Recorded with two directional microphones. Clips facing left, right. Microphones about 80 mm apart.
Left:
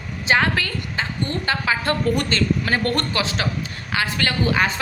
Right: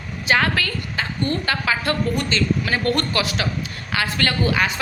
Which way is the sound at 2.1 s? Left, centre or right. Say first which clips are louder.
Even; left.